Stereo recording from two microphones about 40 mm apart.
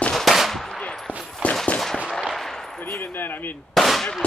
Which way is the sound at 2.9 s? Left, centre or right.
Left.